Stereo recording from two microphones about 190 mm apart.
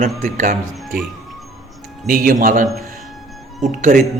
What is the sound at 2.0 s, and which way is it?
Speech, 45° right (ahead or behind).